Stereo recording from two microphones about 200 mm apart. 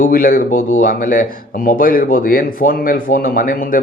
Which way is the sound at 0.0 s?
45° left (ahead or behind).